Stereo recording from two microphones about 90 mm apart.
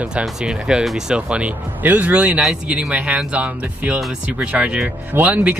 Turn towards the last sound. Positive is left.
turn(degrees=-20)  # may be behind; listen again after turning